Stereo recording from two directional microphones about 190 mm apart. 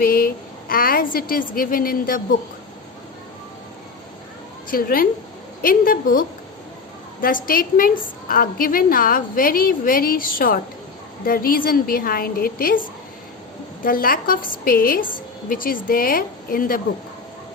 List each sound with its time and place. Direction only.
0.0 s a woman's voice: 50° left (ahead or behind)
4.7 s a woman's voice: 50° left (ahead or behind)
13.8 s a woman's voice: 50° left (ahead or behind)